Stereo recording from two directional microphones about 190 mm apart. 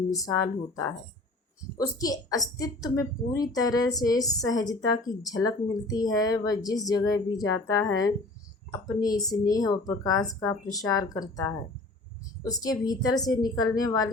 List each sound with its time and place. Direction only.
0.3 s a woman's voice: 15° left (ahead or behind)